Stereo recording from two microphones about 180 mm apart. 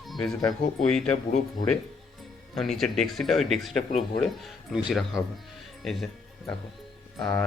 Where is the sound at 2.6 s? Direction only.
Centre (ahead or behind).